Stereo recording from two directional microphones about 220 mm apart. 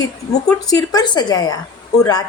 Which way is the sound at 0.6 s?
15° left (ahead or behind).